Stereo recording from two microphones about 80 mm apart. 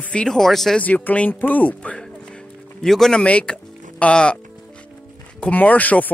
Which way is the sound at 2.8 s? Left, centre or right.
Centre.